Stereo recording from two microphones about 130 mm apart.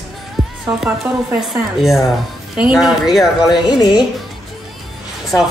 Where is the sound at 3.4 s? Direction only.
35° left (ahead or behind).